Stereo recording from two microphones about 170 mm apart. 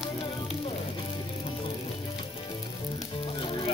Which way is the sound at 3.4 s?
30° left (ahead or behind).